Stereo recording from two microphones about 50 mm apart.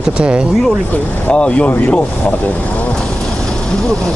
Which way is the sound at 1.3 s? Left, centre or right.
Left.